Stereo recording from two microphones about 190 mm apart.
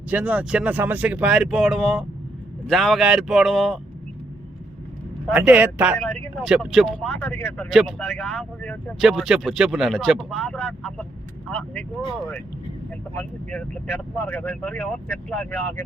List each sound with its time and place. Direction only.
0.1 s speech: 10° right (ahead or behind)
5.3 s speech: 5° right (ahead or behind); by 7.7 s 15° left (ahead or behind)
7.7 s speech: centre (ahead or behind)
13.1 s speech: 10° left (ahead or behind)